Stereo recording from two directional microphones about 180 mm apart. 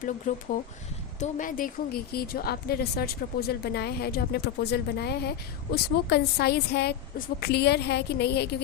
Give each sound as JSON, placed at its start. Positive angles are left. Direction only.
{"t": 0.3, "sound": "a woman's voice", "side_deg": 45}